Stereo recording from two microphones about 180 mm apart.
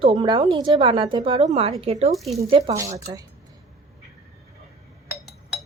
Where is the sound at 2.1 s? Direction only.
Centre (ahead or behind).